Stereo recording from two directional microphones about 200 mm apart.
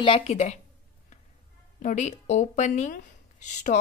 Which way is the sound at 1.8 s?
40° left (ahead or behind).